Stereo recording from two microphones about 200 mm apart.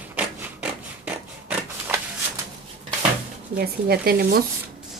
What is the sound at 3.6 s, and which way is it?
Speech, 50° right (ahead or behind).